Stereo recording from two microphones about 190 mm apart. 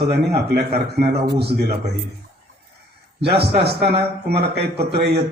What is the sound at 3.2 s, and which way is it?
A man's voice, 60° right (ahead or behind).